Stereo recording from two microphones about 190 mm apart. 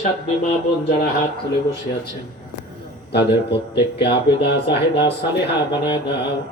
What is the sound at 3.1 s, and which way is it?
A man's voice, 60° left (ahead or behind).